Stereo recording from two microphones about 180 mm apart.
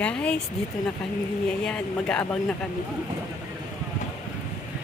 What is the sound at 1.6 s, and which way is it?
Speech, 5° left (ahead or behind).